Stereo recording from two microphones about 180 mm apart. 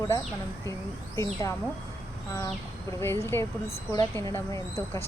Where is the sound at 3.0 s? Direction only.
15° left (ahead or behind).